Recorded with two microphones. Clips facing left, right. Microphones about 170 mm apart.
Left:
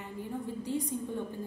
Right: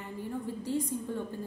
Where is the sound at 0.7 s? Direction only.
15° left (ahead or behind).